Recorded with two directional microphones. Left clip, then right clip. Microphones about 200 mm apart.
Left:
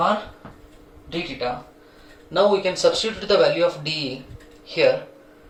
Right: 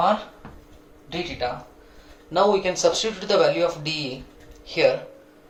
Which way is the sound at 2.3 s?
40° right (ahead or behind).